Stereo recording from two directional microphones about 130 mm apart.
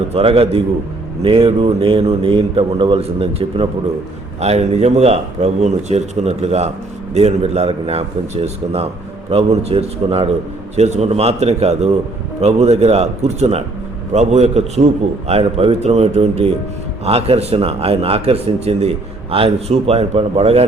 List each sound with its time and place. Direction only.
0.1 s a man's voice: 45° right (ahead or behind)
10.8 s a man's voice: 60° right (ahead or behind)